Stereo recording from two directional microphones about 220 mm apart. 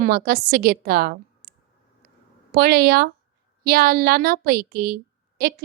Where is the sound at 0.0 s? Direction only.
45° right (ahead or behind).